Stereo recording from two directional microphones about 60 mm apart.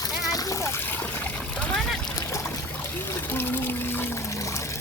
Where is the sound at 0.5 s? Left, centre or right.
Left.